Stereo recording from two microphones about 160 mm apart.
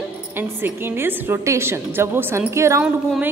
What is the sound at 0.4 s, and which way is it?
A woman's voice, 15° right (ahead or behind).